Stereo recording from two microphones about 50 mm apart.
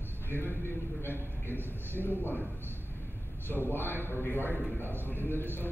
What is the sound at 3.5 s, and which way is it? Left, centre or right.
A man's voice, left.